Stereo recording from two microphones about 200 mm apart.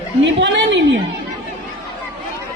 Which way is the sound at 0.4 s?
60° right (ahead or behind).